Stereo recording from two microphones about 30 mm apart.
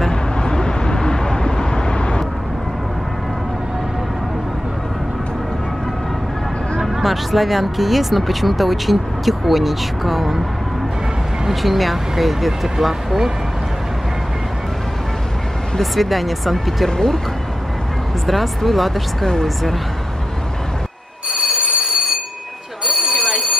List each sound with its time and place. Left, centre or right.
0.1 s vehicle: left
6.9 s speech: centre
11.6 s speech: centre
15.8 s speech: centre
16.9 s speech: left
18.2 s speech: centre
21.3 s telephone bell ringing: centre